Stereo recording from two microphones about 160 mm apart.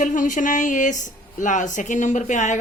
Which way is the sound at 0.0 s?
55° left (ahead or behind).